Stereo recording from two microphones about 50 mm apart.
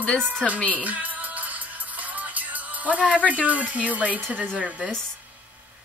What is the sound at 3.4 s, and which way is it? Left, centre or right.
Speech, right.